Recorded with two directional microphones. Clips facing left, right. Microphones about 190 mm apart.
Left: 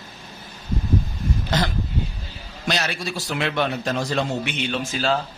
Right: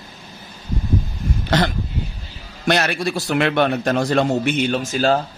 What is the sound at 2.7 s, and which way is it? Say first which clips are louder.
A man's voice: right 7 dB; 60° right (ahead or behind).